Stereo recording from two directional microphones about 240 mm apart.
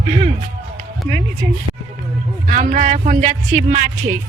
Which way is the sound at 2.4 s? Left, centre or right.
Right.